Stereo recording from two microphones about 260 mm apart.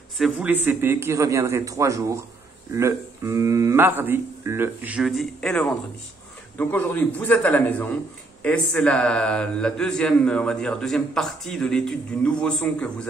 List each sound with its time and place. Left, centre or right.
0.2 s a man's voice: centre